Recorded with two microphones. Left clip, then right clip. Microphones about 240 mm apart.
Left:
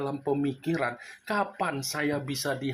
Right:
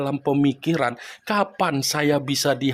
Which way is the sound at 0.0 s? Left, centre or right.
Right.